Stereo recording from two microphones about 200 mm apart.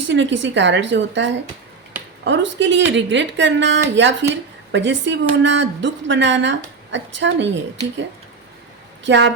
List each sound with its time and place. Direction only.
0.1 s speech: 65° right (ahead or behind)
9.0 s speech: 60° right (ahead or behind)